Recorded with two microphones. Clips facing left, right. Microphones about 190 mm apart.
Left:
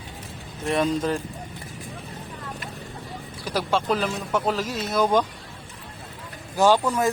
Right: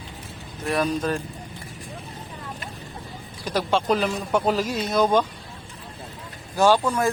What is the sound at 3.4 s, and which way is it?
Speech, 10° left (ahead or behind).